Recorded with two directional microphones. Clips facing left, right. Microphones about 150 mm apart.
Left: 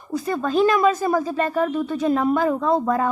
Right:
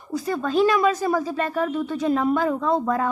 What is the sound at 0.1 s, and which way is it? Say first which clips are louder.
Speech: left 1 dB; 50° left (ahead or behind).